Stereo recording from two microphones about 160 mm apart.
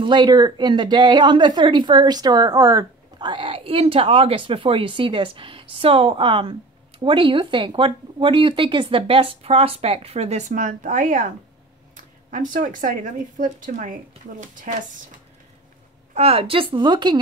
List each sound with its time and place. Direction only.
0.0 s a woman's voice: 30° right (ahead or behind); by 14.8 s 55° right (ahead or behind)
16.2 s a woman's voice: 40° right (ahead or behind)